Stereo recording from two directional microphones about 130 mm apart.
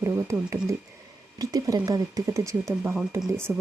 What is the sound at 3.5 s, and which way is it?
Speech, 5° right (ahead or behind).